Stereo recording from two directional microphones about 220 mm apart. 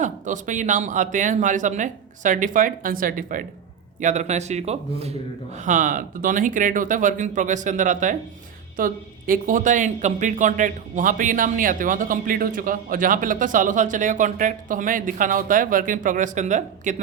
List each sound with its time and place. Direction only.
0.0 s speech: 35° right (ahead or behind)